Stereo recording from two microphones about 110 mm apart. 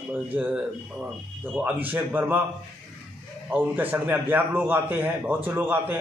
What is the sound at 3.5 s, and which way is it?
A man's voice, 15° right (ahead or behind).